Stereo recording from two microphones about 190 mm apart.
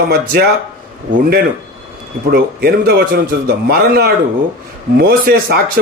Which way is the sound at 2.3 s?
55° right (ahead or behind).